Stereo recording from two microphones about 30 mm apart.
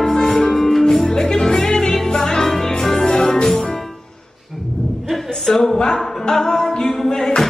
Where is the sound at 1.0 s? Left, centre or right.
Centre.